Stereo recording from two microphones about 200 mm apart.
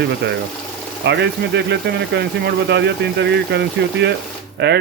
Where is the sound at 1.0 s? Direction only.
60° right (ahead or behind).